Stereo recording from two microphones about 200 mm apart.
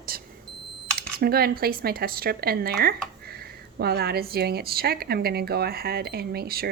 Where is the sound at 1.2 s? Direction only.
50° right (ahead or behind).